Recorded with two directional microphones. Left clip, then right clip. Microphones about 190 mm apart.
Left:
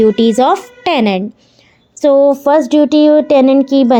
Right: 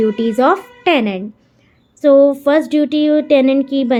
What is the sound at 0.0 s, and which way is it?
Speech, 35° left (ahead or behind).